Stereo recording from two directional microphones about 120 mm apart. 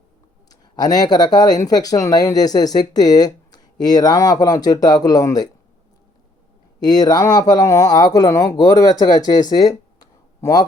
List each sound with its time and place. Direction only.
0.6 s speech: 35° left (ahead or behind)
6.7 s speech: 35° left (ahead or behind)